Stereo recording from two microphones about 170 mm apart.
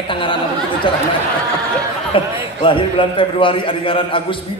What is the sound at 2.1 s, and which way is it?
A man's voice, 30° left (ahead or behind).